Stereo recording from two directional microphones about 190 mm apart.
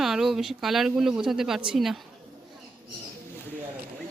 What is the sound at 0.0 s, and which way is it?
Speech, centre (ahead or behind).